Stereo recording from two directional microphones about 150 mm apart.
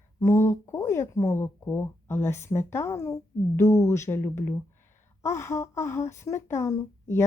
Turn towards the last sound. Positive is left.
turn(degrees=20)  # may be behind; listen again after turning